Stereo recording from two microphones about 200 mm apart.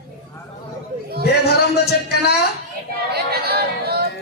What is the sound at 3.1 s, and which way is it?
Yodeling, 50° right (ahead or behind).